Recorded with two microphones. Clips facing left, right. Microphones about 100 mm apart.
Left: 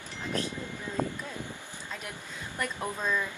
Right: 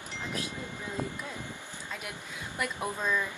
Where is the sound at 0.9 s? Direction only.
15° right (ahead or behind).